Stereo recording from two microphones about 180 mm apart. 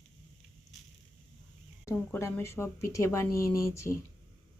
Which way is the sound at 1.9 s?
15° left (ahead or behind).